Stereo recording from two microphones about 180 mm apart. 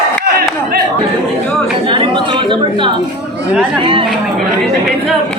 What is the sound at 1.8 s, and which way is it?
Chatter, 25° right (ahead or behind).